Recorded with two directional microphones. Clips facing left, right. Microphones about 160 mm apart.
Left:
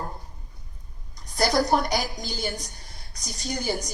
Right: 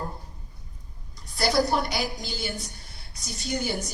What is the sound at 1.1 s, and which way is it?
A woman's voice, 45° left (ahead or behind).